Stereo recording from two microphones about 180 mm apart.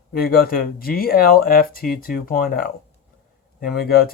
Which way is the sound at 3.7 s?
55° left (ahead or behind).